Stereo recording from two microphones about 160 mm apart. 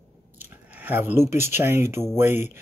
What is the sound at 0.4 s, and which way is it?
Speech, 10° right (ahead or behind).